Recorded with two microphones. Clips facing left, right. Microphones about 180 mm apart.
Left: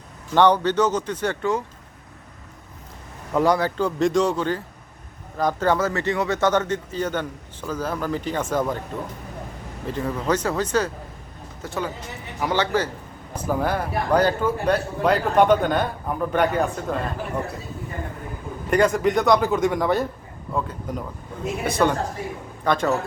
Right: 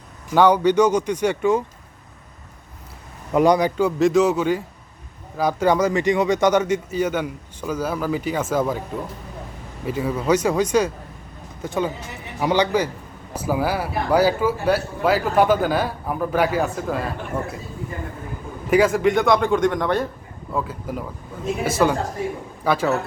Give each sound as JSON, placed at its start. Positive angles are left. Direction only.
{"t": 0.3, "sound": "speech", "side_deg": -10}
{"t": 3.3, "sound": "speech", "side_deg": -20}
{"t": 3.8, "sound": "speech", "side_deg": -5}
{"t": 9.8, "sound": "speech", "side_deg": -10}
{"t": 18.7, "sound": "speech", "side_deg": -5}